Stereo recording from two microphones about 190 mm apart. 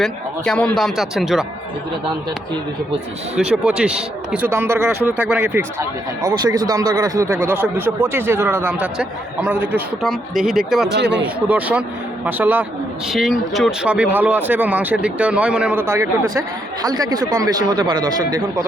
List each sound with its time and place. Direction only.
0.0 s speech: 5° left (ahead or behind)
3.3 s speech: 5° right (ahead or behind)
6.2 s speech: 20° right (ahead or behind); by 10.9 s centre (ahead or behind)
10.9 s a man's voice: 65° right (ahead or behind)
11.2 s speech: 10° right (ahead or behind)